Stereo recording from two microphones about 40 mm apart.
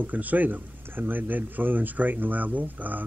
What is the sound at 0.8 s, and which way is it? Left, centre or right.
Speech, right.